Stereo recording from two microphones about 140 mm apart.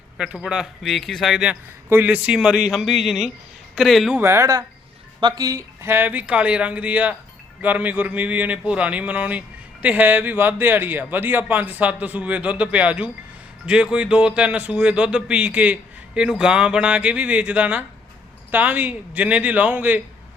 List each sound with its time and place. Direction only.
0.2 s speech: 5° right (ahead or behind)
4.2 s speech: 20° right (ahead or behind)